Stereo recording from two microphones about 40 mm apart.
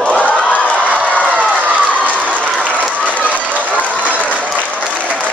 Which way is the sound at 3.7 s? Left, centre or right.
Left.